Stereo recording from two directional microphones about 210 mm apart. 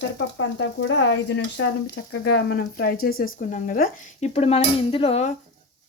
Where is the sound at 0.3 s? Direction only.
65° left (ahead or behind); by 3.2 s 45° left (ahead or behind).